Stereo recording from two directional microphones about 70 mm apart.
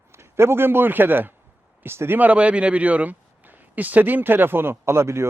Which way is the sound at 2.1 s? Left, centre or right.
Right.